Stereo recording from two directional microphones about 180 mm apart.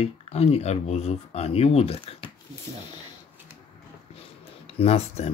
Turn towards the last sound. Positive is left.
turn(degrees=35)  # may be behind; listen again after turning